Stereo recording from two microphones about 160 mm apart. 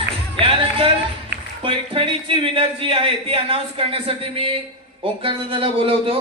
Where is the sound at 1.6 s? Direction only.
35° right (ahead or behind).